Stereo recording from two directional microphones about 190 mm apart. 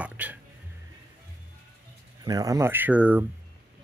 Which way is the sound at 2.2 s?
20° right (ahead or behind).